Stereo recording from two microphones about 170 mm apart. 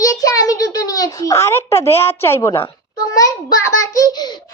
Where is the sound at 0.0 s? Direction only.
20° left (ahead or behind).